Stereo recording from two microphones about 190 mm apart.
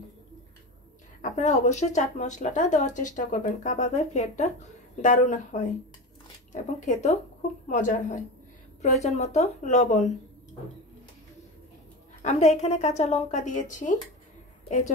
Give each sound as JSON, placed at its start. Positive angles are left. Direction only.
{"t": 1.2, "sound": "speech", "side_deg": 40}
{"t": 12.2, "sound": "speech", "side_deg": 35}